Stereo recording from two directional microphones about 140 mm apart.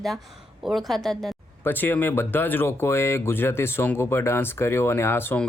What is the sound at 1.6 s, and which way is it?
Speech, 15° left (ahead or behind).